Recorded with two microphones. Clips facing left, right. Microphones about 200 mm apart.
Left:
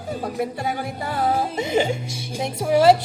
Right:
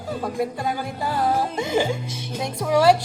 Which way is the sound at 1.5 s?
20° left (ahead or behind).